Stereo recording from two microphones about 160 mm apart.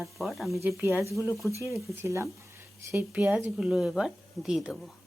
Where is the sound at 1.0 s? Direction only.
20° right (ahead or behind); by 4.9 s centre (ahead or behind).